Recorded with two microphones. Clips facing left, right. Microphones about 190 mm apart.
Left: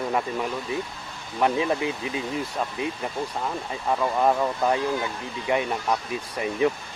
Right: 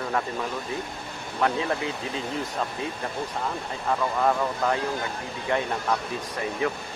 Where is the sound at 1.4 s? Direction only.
15° left (ahead or behind).